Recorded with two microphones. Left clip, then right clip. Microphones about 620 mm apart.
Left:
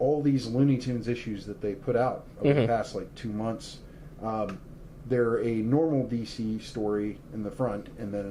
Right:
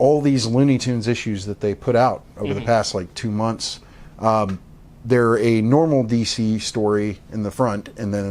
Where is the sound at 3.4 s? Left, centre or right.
Right.